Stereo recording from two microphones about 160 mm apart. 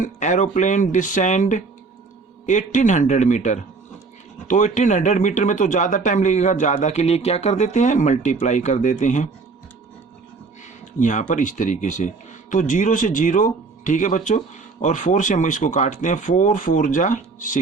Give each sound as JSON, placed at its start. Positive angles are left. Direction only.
{"t": 0.0, "sound": "speech", "side_deg": 50}
{"t": 11.0, "sound": "speech", "side_deg": 50}